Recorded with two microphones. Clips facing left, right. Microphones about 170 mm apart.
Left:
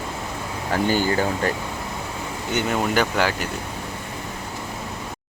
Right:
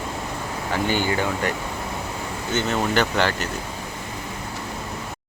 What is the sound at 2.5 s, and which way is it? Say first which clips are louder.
Speech: even; 15° left (ahead or behind).